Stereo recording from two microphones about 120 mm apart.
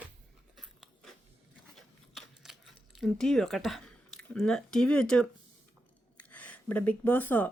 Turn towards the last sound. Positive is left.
turn(degrees=15)  # may be behind; listen again after turning